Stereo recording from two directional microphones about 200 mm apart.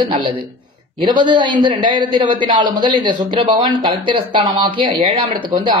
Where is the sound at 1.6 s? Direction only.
25° right (ahead or behind).